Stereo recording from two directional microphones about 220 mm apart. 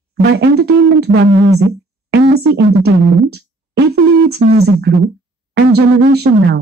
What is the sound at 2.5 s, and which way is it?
Speech, 45° right (ahead or behind).